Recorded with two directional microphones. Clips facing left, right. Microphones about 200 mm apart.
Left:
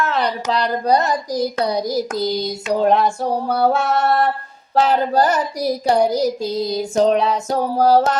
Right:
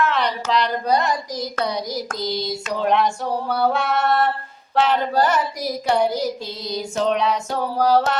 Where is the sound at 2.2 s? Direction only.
40° left (ahead or behind).